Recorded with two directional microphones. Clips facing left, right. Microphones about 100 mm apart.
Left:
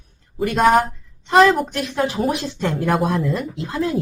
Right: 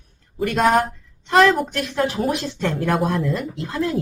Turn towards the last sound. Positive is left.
turn(degrees=15)  # may be behind; listen again after turning